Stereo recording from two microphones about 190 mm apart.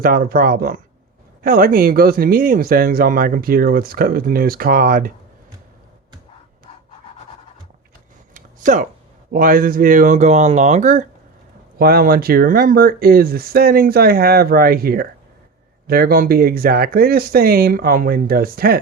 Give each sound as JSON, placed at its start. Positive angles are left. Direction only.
{"t": 0.0, "sound": "speech", "side_deg": -50}
{"t": 8.3, "sound": "a sound", "side_deg": -45}
{"t": 9.3, "sound": "speech", "side_deg": -45}
{"t": 11.8, "sound": "speech", "side_deg": -50}